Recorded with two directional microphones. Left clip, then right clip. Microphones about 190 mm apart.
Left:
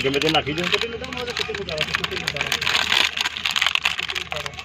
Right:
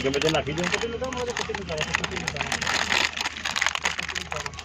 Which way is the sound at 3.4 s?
35° right (ahead or behind).